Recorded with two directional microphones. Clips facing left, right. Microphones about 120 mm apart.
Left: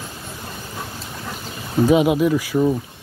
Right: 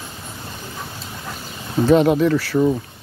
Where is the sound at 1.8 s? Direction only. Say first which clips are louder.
Right 1 dB; 10° left (ahead or behind).